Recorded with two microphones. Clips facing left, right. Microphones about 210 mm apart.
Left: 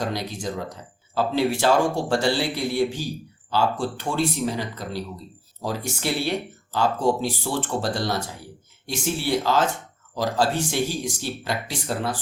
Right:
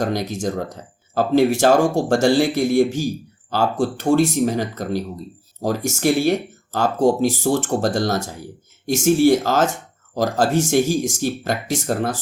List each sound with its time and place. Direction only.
0.0 s speech: 45° right (ahead or behind)